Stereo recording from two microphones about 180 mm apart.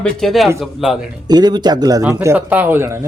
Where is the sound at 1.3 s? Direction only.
20° right (ahead or behind).